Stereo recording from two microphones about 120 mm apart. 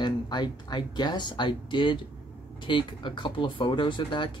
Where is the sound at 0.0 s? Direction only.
40° left (ahead or behind).